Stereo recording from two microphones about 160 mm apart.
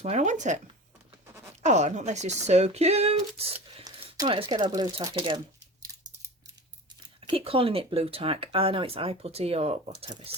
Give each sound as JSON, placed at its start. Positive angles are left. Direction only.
{"t": 0.0, "sound": "speech", "side_deg": -45}
{"t": 1.6, "sound": "speech", "side_deg": -45}
{"t": 3.8, "sound": "a sound", "side_deg": -25}
{"t": 4.4, "sound": "speech", "side_deg": -25}
{"t": 7.2, "sound": "speech", "side_deg": -35}
{"t": 10.1, "sound": "speech", "side_deg": -30}